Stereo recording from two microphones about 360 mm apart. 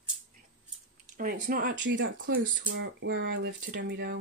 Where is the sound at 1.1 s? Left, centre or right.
Right.